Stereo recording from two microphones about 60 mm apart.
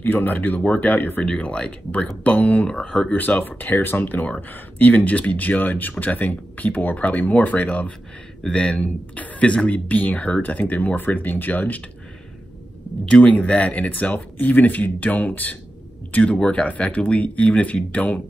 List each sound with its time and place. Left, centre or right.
0.0 s speech: left
1.4 s speech: left
2.7 s speech: centre
3.1 s speech: left
13.1 s speech: centre